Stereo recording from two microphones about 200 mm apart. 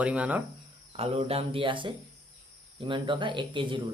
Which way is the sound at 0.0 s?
5° right (ahead or behind).